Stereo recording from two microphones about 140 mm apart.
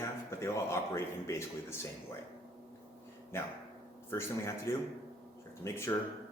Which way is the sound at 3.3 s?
20° left (ahead or behind).